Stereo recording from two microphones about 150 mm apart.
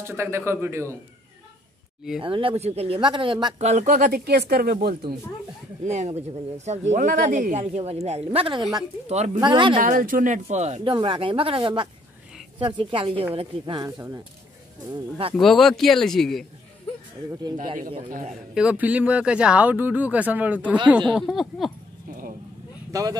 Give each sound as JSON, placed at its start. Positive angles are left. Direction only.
{"t": 0.0, "sound": "speech", "side_deg": -15}
{"t": 2.2, "sound": "speech", "side_deg": -35}
{"t": 3.5, "sound": "speech", "side_deg": -50}
{"t": 5.9, "sound": "speech", "side_deg": -45}
{"t": 9.4, "sound": "speech", "side_deg": -35}
{"t": 9.8, "sound": "speech", "side_deg": -65}
{"t": 10.8, "sound": "speech", "side_deg": -35}
{"t": 13.8, "sound": "speech", "side_deg": -20}
{"t": 15.3, "sound": "speech", "side_deg": 0}
{"t": 18.5, "sound": "speech", "side_deg": -5}
{"t": 22.9, "sound": "speech", "side_deg": -20}